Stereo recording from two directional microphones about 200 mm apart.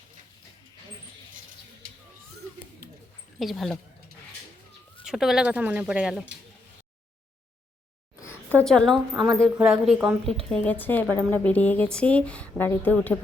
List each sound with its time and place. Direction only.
2.8 s bird: 55° right (ahead or behind)
3.3 s speech: centre (ahead or behind)
5.0 s a woman's voice: centre (ahead or behind)
8.2 s a sound: 10° left (ahead or behind)
9.1 s a woman's voice: 20° right (ahead or behind)
9.6 s a woman's voice: 5° right (ahead or behind)
10.5 s a woman's voice: 5° left (ahead or behind)